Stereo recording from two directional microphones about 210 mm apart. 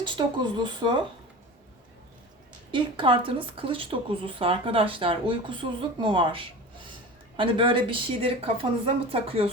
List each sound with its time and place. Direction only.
0.0 s speech: 20° right (ahead or behind)
2.7 s speech: 25° right (ahead or behind)